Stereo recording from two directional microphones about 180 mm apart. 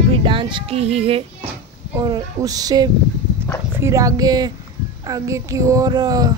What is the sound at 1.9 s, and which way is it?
Speech, 20° right (ahead or behind).